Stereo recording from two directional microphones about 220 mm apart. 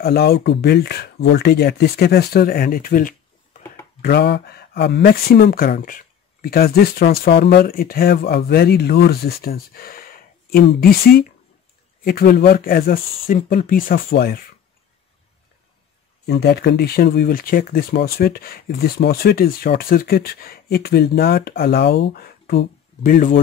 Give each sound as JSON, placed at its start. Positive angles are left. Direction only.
{"t": 0.0, "sound": "speech", "side_deg": 45}
{"t": 16.3, "sound": "speech", "side_deg": 45}